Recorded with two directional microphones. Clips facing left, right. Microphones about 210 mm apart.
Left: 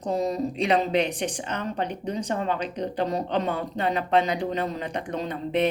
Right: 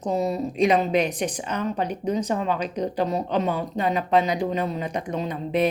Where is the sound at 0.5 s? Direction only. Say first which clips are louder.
Right 4 dB; 30° left (ahead or behind).